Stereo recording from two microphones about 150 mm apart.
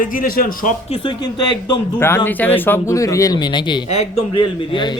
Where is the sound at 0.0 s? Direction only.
70° left (ahead or behind).